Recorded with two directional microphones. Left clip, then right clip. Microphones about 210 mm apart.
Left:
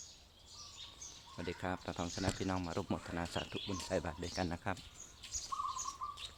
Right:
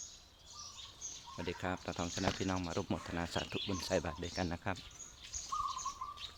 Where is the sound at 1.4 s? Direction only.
5° right (ahead or behind).